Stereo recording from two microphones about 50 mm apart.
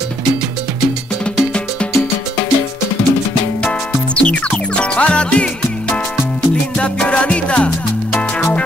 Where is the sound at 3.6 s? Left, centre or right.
Left.